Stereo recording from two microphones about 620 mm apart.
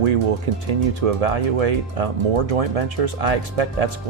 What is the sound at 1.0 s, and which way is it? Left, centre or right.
Speech, right.